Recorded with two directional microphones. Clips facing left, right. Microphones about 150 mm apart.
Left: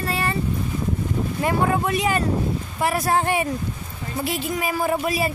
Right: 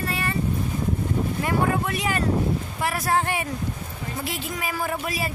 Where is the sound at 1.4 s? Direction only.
25° left (ahead or behind).